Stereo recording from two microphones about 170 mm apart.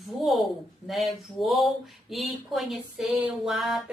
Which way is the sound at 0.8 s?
Centre (ahead or behind).